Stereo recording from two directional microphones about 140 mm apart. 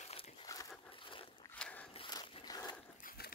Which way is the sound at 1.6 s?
10° left (ahead or behind).